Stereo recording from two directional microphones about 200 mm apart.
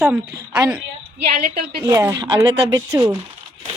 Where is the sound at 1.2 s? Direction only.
50° right (ahead or behind).